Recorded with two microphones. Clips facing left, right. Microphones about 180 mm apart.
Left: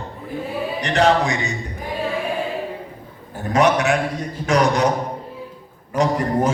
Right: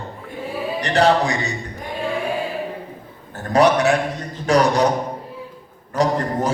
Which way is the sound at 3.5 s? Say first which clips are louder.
Right 2 dB; 35° right (ahead or behind).